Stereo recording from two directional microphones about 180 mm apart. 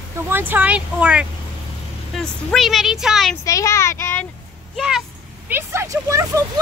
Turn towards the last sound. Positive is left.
turn(degrees=-15)  # may be behind; listen again after turning